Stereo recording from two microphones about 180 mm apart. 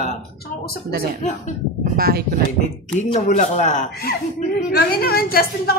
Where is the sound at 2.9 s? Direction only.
40° left (ahead or behind).